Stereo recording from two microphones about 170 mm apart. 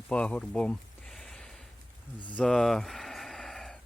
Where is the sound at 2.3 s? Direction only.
5° left (ahead or behind).